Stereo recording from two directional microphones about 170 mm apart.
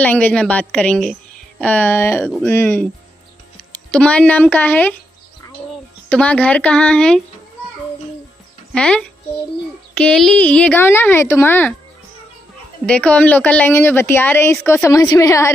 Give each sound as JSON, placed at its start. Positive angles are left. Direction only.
{"t": 0.0, "sound": "a woman's voice", "side_deg": 10}
{"t": 3.9, "sound": "a woman's voice", "side_deg": 10}
{"t": 6.0, "sound": "a woman's voice", "side_deg": 5}
{"t": 8.7, "sound": "a child's voice", "side_deg": 5}
{"t": 12.8, "sound": "a woman's voice", "side_deg": 5}